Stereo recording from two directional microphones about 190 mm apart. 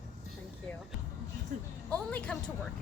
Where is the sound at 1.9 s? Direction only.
5° left (ahead or behind).